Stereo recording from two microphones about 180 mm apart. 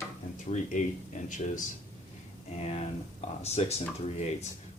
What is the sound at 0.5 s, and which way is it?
Speech, 45° left (ahead or behind).